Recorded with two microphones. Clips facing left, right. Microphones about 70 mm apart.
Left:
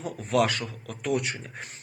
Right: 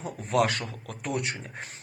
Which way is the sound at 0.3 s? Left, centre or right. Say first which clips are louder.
Left 1 dB; right.